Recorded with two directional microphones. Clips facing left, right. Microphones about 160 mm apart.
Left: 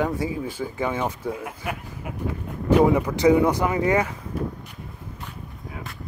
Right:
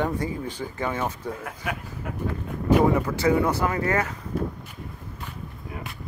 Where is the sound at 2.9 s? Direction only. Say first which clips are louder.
Left 4 dB; 15° left (ahead or behind).